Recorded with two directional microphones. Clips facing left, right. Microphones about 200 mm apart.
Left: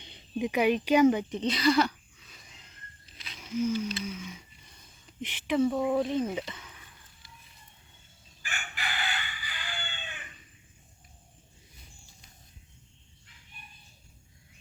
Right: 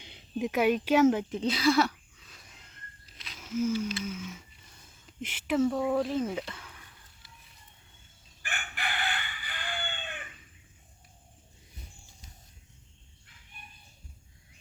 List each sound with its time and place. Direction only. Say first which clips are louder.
0.0 s speech: left 1 dB; 5° right (ahead or behind)
3.2 s wild animals: even; centre (ahead or behind)
4.0 s speech: right 1 dB; 5° right (ahead or behind)
8.4 s crowing: right 1 dB; 55° right (ahead or behind)